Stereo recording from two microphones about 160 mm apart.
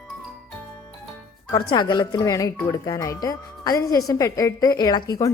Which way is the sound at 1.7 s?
25° left (ahead or behind).